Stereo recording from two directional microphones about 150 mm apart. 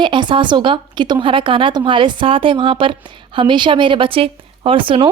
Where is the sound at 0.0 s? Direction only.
30° right (ahead or behind).